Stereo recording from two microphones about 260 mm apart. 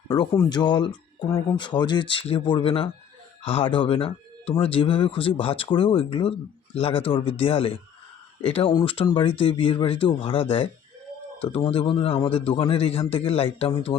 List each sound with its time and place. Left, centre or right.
0.1 s speech: centre
11.4 s speech: left